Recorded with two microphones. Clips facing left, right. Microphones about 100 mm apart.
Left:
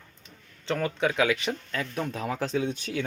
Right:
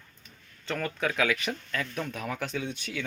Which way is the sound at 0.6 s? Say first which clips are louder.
Left 4 dB; 25° left (ahead or behind).